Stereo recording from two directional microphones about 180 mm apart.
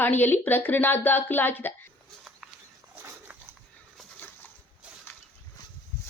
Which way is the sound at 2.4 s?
Centre (ahead or behind).